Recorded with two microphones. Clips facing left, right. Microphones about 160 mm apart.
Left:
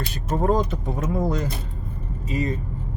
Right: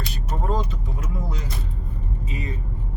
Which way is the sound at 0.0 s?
50° left (ahead or behind).